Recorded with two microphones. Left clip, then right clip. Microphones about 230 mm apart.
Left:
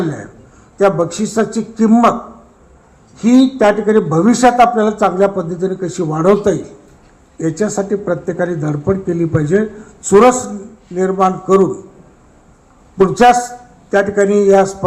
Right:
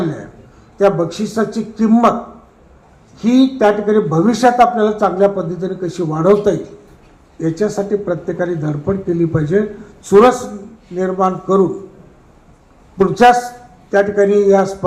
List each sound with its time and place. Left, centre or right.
0.8 s a man's voice: left
3.2 s a man's voice: left
13.0 s a man's voice: left